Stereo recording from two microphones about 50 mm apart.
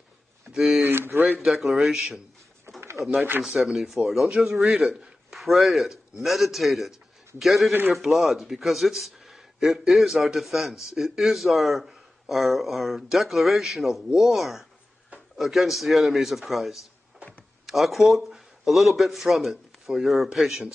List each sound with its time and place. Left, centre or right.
0.5 s speech: centre
0.8 s a sound: right
1.4 s a man's voice: centre
2.8 s pigeon: right
3.4 s speech: centre